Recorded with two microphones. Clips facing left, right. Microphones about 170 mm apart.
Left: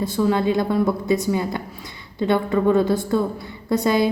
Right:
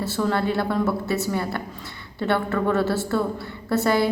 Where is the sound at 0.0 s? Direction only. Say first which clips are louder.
Left 4 dB; 15° left (ahead or behind).